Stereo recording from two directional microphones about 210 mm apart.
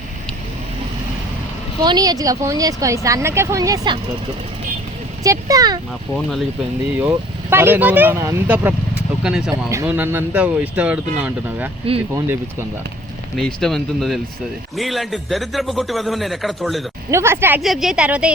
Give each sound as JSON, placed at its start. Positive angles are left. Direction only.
{"t": 1.8, "sound": "speech", "side_deg": -20}
{"t": 5.2, "sound": "speech", "side_deg": -15}
{"t": 7.5, "sound": "speech", "side_deg": -10}
{"t": 13.3, "sound": "a man's voice", "side_deg": 0}
{"t": 17.1, "sound": "a man's voice", "side_deg": -15}